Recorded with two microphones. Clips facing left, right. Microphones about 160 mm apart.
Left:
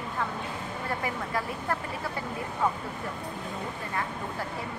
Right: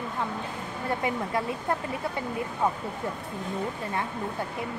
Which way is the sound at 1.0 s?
20° right (ahead or behind).